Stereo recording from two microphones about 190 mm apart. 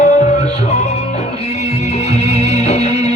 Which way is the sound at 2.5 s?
35° left (ahead or behind).